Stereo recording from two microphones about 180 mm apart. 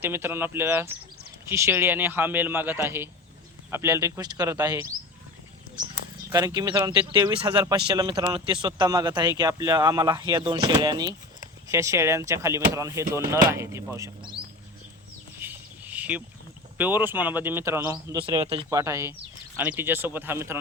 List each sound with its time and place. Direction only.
0.0 s speech: 10° right (ahead or behind)
6.3 s speech: 20° right (ahead or behind)
14.2 s a sound: 25° right (ahead or behind)
15.4 s a sound: 10° right (ahead or behind)
16.7 s speech: 10° right (ahead or behind); by 18.6 s 30° right (ahead or behind)
18.7 s speech: 15° right (ahead or behind)